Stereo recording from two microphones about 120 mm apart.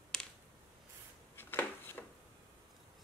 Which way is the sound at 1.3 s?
20° left (ahead or behind).